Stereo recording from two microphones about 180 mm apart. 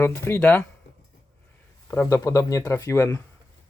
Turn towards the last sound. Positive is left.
turn(degrees=15)  # may be behind; listen again after turning